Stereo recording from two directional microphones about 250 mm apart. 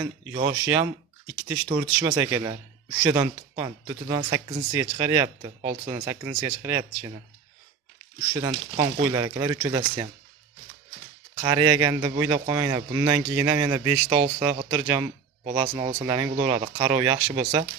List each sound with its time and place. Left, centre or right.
0.6 s speech: centre
1.6 s speech: right
8.3 s speech: centre
8.7 s speech: right
9.1 s speech: centre
11.4 s speech: centre
15.7 s speech: centre